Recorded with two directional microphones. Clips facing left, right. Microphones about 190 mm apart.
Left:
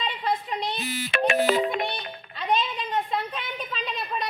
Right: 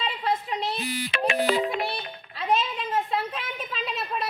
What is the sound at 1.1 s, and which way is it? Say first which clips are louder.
Music: left 3 dB; 50° left (ahead or behind).